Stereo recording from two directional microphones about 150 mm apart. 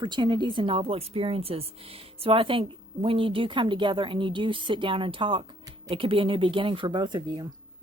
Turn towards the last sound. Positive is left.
turn(degrees=-30)  # may be behind; listen again after turning